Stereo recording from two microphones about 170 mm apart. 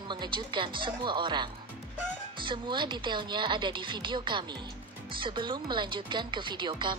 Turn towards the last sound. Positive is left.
turn(degrees=-25)  # may be behind; listen again after turning